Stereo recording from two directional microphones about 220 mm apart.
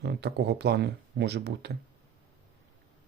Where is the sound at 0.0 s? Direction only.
50° right (ahead or behind).